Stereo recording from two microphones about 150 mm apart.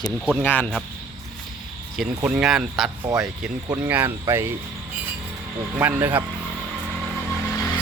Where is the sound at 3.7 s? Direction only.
15° right (ahead or behind).